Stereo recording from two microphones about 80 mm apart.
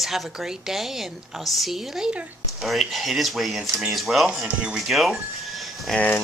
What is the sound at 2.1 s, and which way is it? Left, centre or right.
Speech, centre.